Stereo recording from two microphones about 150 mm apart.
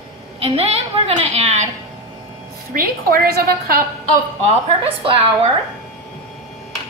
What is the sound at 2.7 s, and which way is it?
A woman's voice, 70° right (ahead or behind).